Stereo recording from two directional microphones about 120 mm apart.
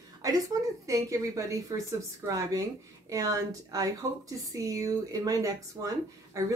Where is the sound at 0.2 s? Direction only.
30° right (ahead or behind).